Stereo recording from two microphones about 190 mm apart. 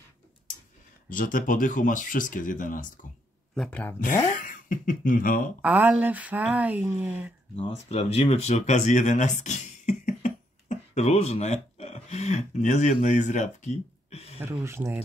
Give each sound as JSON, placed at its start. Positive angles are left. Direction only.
{"t": 1.0, "sound": "speech", "side_deg": 45}
{"t": 3.5, "sound": "speech", "side_deg": 5}
{"t": 4.0, "sound": "speech", "side_deg": 45}
{"t": 5.6, "sound": "speech", "side_deg": -10}
{"t": 7.5, "sound": "speech", "side_deg": 30}
{"t": 14.4, "sound": "speech", "side_deg": -15}